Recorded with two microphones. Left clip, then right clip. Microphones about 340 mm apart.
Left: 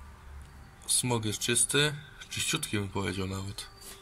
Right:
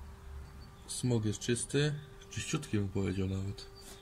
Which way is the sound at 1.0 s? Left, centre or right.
Left.